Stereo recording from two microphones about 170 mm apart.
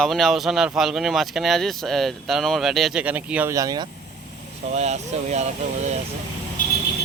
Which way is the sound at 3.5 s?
20° right (ahead or behind).